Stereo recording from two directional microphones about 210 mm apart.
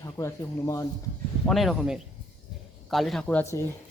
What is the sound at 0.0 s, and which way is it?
Speech, 15° left (ahead or behind).